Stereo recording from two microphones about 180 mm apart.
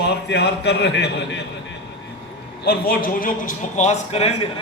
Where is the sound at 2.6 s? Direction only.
60° left (ahead or behind).